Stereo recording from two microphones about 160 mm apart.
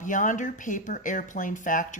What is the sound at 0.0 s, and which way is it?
Speech, 55° left (ahead or behind).